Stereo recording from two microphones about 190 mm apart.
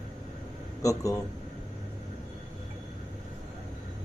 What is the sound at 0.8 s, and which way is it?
Speech, 15° left (ahead or behind).